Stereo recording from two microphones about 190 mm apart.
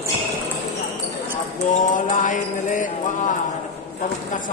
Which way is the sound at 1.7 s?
40° left (ahead or behind).